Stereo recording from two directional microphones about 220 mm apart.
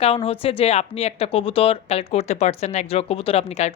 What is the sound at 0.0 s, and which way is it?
Speech, 25° left (ahead or behind).